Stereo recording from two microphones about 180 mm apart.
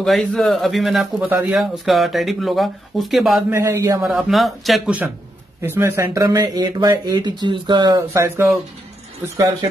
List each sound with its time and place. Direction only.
0.0 s a man's voice: centre (ahead or behind)
3.5 s speech: 15° right (ahead or behind)
4.0 s a man's voice: centre (ahead or behind)